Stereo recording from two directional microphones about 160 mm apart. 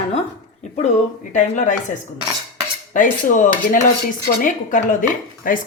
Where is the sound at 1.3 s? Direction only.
50° left (ahead or behind).